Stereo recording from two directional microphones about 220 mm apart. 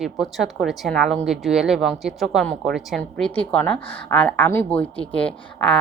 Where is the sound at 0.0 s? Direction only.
Centre (ahead or behind).